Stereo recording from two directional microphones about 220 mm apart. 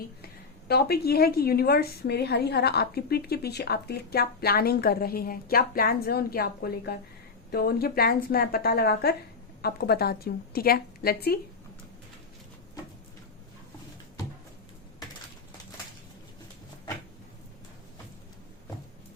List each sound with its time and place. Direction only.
0.7 s a woman's voice: 45° left (ahead or behind)